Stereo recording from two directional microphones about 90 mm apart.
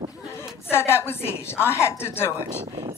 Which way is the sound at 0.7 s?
25° left (ahead or behind).